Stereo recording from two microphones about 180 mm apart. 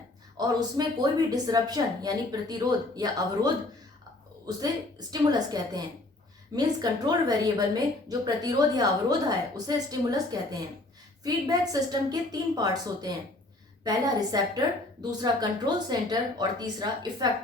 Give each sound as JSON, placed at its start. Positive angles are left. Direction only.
{"t": 0.3, "sound": "a woman's voice", "side_deg": -20}